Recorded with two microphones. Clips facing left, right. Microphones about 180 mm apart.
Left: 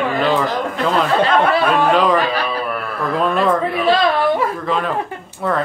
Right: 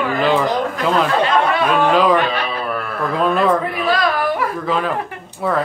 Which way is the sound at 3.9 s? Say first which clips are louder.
Left 3 dB; 25° left (ahead or behind).